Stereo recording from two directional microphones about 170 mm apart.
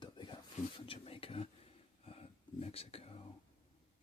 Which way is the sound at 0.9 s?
35° left (ahead or behind).